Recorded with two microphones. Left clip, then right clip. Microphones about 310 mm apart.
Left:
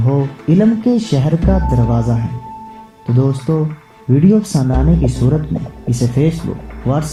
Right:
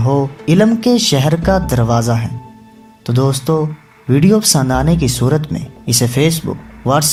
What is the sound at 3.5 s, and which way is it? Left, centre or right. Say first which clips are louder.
A man's voice: right 3 dB; right.